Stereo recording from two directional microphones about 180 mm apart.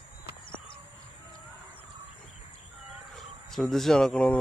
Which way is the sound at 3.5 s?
Centre (ahead or behind).